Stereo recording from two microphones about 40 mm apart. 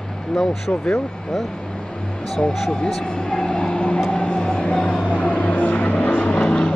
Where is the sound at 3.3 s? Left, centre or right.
Centre.